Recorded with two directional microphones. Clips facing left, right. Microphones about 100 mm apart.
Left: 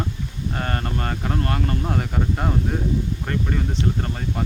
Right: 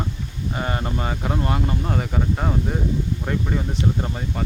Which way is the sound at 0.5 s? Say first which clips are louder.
Right 1 dB; 10° right (ahead or behind).